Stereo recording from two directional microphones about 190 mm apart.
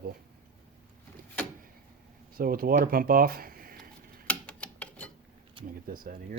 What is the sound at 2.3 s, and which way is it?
Speech, 50° right (ahead or behind).